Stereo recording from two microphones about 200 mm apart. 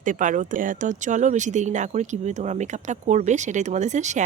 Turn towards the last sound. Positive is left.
turn(degrees=-35)  # may be behind; listen again after turning